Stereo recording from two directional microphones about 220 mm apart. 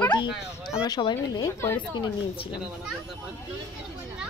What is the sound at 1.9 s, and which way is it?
Speech, 20° left (ahead or behind).